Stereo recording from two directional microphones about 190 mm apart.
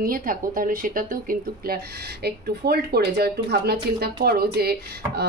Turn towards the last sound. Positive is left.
turn(degrees=-55)  # may be behind; listen again after turning